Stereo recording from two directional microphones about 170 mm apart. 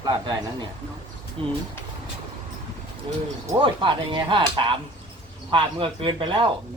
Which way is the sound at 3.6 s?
30° right (ahead or behind).